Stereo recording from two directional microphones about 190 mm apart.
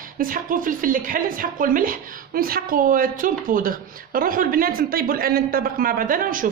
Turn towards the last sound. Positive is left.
turn(degrees=-45)  # may be behind; listen again after turning